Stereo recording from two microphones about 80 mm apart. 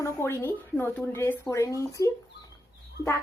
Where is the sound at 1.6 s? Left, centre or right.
Left.